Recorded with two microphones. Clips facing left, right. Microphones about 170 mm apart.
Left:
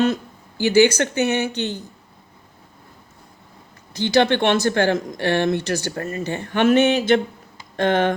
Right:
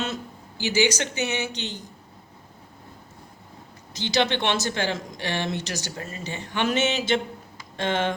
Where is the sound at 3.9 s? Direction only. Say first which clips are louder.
Left 7 dB; 55° left (ahead or behind).